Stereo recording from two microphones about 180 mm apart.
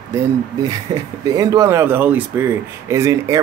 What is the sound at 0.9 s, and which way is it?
Speech, 20° right (ahead or behind).